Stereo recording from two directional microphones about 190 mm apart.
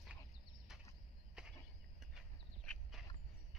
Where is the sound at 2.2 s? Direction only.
Centre (ahead or behind).